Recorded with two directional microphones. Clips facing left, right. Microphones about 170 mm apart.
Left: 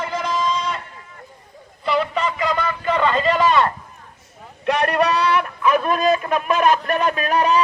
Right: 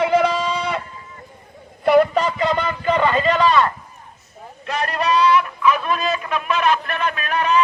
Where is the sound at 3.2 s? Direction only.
5° left (ahead or behind).